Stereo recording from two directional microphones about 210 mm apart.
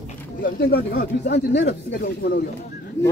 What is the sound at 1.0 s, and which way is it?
Speech, 50° left (ahead or behind).